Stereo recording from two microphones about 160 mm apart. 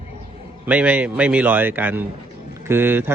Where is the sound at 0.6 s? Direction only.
10° right (ahead or behind).